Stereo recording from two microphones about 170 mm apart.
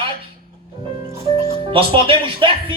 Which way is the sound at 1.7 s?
30° right (ahead or behind).